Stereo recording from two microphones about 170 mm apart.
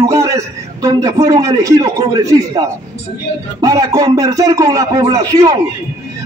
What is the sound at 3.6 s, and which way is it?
A man's voice, 20° right (ahead or behind).